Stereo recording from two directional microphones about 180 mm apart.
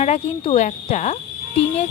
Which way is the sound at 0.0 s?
35° left (ahead or behind).